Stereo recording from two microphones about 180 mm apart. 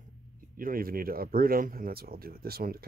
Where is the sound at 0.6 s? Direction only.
50° right (ahead or behind).